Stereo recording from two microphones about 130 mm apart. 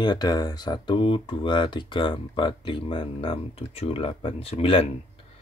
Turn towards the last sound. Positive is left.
turn(degrees=45)  # may be behind; listen again after turning